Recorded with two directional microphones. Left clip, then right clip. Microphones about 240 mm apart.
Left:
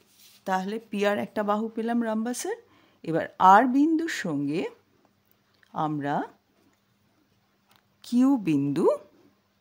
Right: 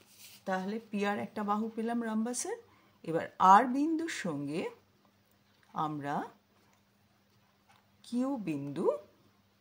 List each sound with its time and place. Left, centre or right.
0.4 s speech: left
8.0 s speech: left